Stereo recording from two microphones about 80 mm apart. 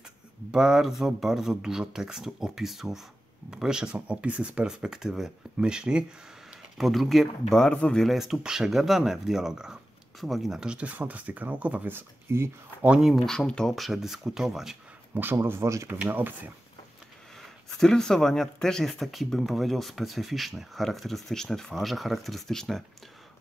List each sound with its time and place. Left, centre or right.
0.5 s speech: centre
8.0 s speech: centre
12.3 s speech: right
13.0 s speech: centre
15.3 s speech: right
16.1 s speech: right
17.6 s speech: centre